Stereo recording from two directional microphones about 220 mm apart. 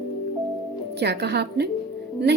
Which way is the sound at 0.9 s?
50° right (ahead or behind).